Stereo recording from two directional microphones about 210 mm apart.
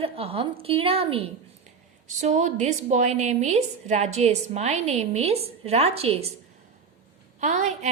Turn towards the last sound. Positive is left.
turn(degrees=-35)  # may be behind; listen again after turning